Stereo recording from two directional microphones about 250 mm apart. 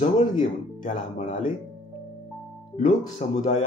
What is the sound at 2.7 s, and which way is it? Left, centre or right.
Speech, left.